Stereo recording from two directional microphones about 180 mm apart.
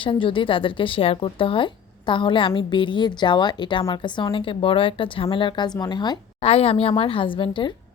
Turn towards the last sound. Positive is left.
turn(degrees=25)  # may be behind; listen again after turning